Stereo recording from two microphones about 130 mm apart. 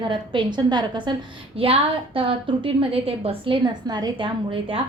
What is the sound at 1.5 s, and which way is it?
A woman's voice, 45° right (ahead or behind).